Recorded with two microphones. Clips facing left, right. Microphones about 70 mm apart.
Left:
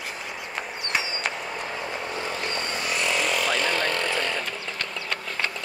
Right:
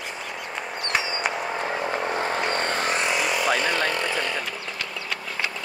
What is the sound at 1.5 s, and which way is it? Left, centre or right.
Vehicle, right.